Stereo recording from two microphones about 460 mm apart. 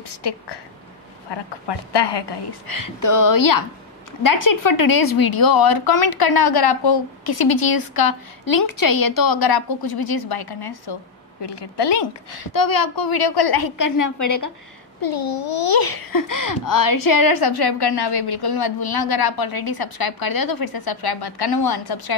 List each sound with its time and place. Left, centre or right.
0.1 s a woman's voice: left
12.5 s a child's voice: left